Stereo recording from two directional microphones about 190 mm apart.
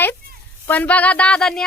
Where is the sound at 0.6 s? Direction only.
10° left (ahead or behind).